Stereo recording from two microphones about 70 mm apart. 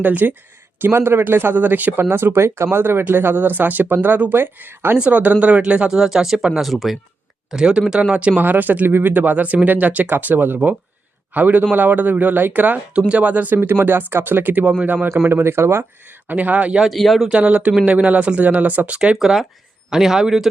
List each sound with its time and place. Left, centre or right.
0.0 s speech: right
4.9 s speech: centre
7.5 s speech: centre; by 14.6 s right
14.6 s speech: centre
16.8 s speech: centre
17.2 s speech: centre
19.2 s speech: centre